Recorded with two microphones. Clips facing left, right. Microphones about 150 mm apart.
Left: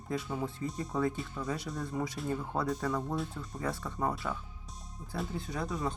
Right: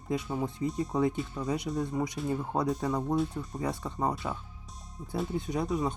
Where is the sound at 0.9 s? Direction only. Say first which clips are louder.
Right 1 dB; 20° right (ahead or behind).